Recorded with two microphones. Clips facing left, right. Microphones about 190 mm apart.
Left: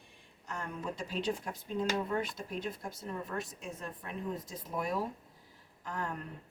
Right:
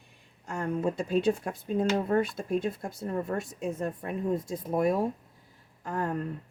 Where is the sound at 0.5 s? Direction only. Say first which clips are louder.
Right 10 dB; 45° right (ahead or behind).